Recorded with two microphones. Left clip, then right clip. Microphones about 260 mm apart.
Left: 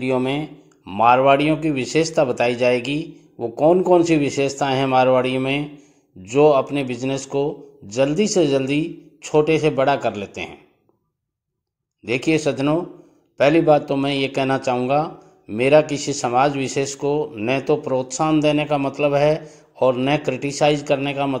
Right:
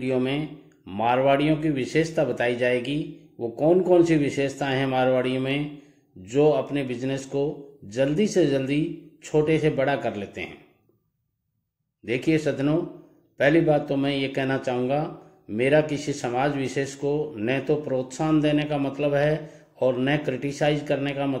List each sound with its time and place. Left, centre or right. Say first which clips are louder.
0.0 s a man's voice: left 4 dB; centre
12.0 s a man's voice: left 4 dB; centre